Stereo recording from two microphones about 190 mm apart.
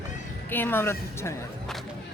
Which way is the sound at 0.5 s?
10° left (ahead or behind).